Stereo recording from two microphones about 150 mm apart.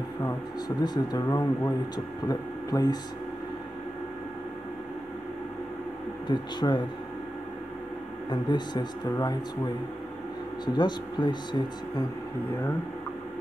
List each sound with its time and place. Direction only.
0.2 s speech: 25° left (ahead or behind)
6.2 s speech: 30° left (ahead or behind)
8.3 s speech: 30° left (ahead or behind)
10.6 s speech: 30° left (ahead or behind)